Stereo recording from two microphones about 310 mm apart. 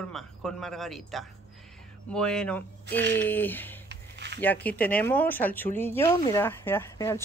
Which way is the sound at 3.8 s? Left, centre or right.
Right.